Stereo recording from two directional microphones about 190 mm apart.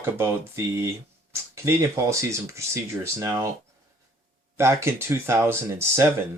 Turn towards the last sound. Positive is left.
turn(degrees=-15)  # may be behind; listen again after turning